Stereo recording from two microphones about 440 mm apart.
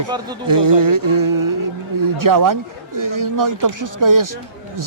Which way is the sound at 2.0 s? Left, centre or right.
Right.